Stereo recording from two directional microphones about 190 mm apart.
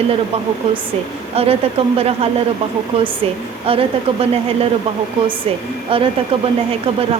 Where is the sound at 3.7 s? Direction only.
30° right (ahead or behind).